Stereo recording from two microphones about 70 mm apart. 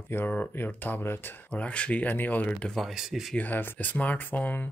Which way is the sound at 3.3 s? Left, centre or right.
Left.